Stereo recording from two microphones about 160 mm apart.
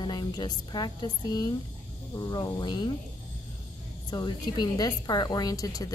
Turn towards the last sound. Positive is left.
turn(degrees=20)  # may be behind; listen again after turning